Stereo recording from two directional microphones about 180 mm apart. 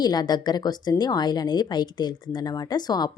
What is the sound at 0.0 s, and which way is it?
A woman's voice, 20° left (ahead or behind).